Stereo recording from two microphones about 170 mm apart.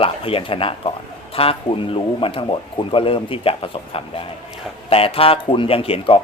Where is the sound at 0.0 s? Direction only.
35° left (ahead or behind).